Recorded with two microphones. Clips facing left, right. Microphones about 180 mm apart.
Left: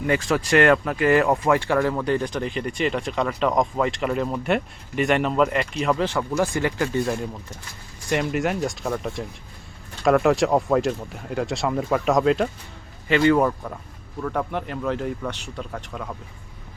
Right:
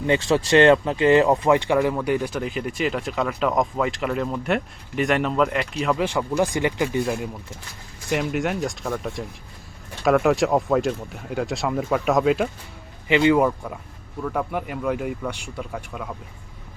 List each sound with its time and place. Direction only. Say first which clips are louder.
0.1 s speech: right 2 dB; 25° right (ahead or behind); by 6.0 s centre (ahead or behind)
6.0 s speech: right 1 dB; 15° right (ahead or behind)
8.1 s speech: left 1 dB; centre (ahead or behind)
13.1 s speech: right 1 dB; 15° right (ahead or behind)